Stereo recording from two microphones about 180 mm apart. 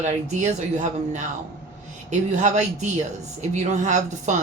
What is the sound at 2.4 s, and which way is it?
A woman's voice, 40° right (ahead or behind).